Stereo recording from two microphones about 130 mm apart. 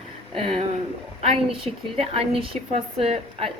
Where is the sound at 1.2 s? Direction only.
45° right (ahead or behind).